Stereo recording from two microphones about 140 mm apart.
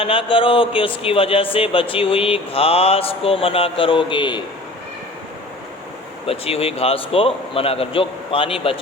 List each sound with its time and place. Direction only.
0.0 s speech: 40° left (ahead or behind)
6.2 s a man's voice: 45° left (ahead or behind)